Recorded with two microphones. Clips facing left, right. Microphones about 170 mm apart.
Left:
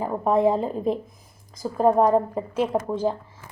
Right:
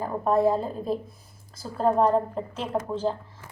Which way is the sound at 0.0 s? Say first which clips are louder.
Left 2 dB; 20° left (ahead or behind).